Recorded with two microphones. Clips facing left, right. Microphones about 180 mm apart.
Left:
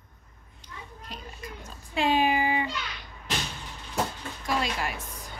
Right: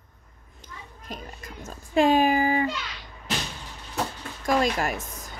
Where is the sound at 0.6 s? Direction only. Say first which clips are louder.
Right 1 dB; 45° right (ahead or behind).